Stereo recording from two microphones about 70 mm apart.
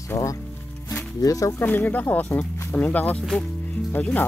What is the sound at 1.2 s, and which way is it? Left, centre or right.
Speech, left.